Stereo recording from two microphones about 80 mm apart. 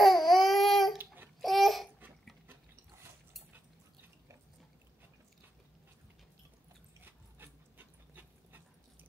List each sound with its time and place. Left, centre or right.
0.0 s baby cry: centre
0.9 s a sound: right
1.4 s babbling: centre
2.4 s ratchet: right
7.0 s dog: right